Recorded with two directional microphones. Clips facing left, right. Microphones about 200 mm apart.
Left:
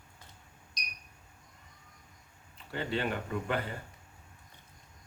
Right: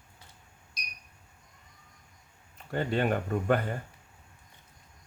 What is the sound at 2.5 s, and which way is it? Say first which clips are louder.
Speech: right 5 dB; 45° right (ahead or behind).